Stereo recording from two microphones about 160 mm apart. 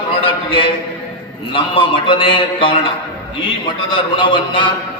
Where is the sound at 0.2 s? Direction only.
35° left (ahead or behind).